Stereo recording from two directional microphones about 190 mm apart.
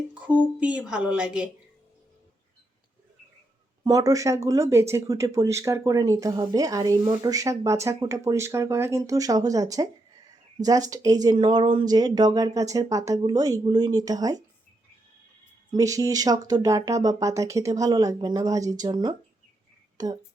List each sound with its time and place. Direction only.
0.1 s speech: 5° right (ahead or behind)
3.8 s speech: 20° right (ahead or behind)
15.7 s speech: 20° right (ahead or behind)